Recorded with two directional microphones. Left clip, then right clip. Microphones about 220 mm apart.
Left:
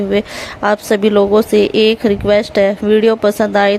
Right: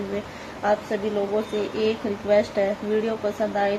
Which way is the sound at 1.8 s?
40° left (ahead or behind).